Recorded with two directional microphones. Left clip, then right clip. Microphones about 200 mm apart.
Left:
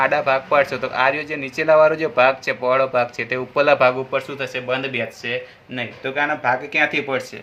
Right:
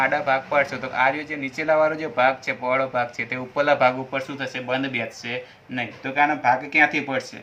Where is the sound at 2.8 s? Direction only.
35° left (ahead or behind).